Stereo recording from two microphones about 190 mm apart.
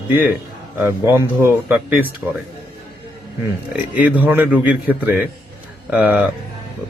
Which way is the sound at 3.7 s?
10° right (ahead or behind).